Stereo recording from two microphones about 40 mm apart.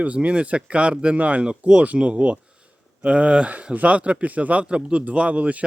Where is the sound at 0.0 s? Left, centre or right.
Right.